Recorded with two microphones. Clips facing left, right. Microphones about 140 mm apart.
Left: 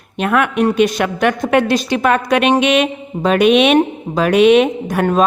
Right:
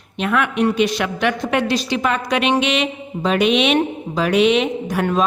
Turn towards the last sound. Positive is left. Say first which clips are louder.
# left 4 dB
turn(degrees=50)  # may be behind; listen again after turning